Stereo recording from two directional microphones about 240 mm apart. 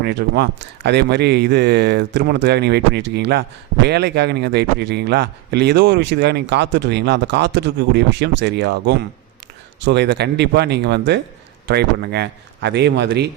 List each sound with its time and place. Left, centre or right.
0.0 s speech: right